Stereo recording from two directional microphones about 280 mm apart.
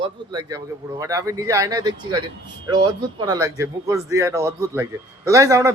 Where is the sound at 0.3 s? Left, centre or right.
Centre.